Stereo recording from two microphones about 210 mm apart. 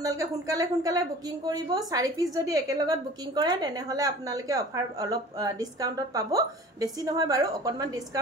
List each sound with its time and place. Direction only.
0.0 s a woman's voice: 15° right (ahead or behind)